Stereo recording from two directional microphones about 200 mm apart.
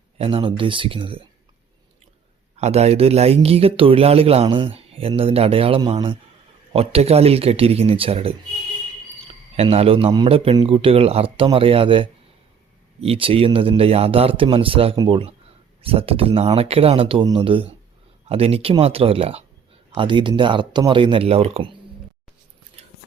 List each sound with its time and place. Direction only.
0.2 s speech: 25° right (ahead or behind)
2.6 s speech: 35° right (ahead or behind)
22.8 s a sound: 30° right (ahead or behind)